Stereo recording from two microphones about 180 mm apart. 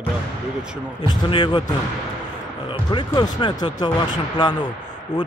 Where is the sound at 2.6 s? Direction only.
25° left (ahead or behind).